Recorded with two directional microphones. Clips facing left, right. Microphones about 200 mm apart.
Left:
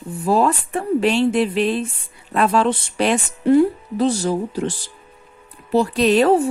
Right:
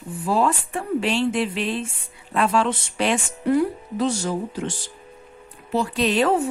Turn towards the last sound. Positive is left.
turn(degrees=40)  # may be behind; listen again after turning